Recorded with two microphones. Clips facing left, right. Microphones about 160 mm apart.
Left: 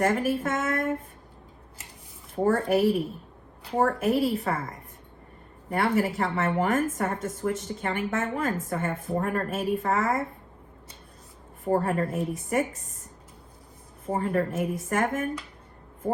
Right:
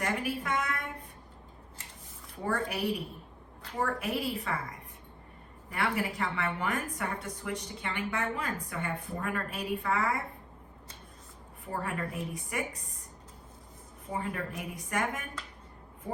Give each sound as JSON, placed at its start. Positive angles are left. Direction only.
{"t": 0.0, "sound": "speech", "side_deg": 45}
{"t": 2.3, "sound": "a woman's voice", "side_deg": 45}
{"t": 11.6, "sound": "a woman's voice", "side_deg": 40}
{"t": 14.1, "sound": "a woman's voice", "side_deg": 45}